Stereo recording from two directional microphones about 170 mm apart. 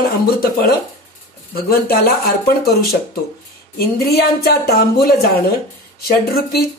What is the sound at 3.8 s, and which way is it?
Speech, 65° left (ahead or behind).